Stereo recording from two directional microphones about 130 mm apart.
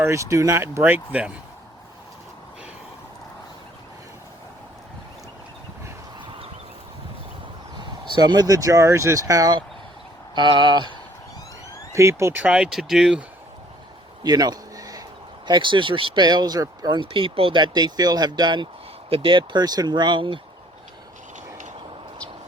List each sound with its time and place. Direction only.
0.0 s speech: 20° right (ahead or behind)
7.8 s speech: 35° right (ahead or behind)
11.9 s speech: 20° right (ahead or behind)
12.4 s speech: 5° right (ahead or behind)
14.3 s a sound: 30° right (ahead or behind)
15.4 s speech: 35° right (ahead or behind)